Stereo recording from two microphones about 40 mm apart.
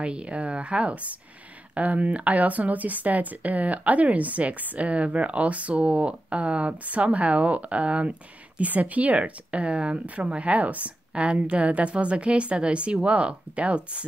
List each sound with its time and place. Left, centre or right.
0.0 s speech: right